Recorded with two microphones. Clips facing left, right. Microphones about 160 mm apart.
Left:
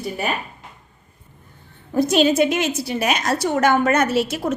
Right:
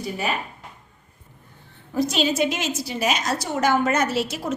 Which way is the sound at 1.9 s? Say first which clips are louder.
Left 6 dB; 55° left (ahead or behind).